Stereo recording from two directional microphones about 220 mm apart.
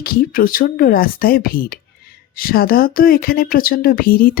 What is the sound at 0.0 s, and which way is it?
A woman's voice, 40° left (ahead or behind).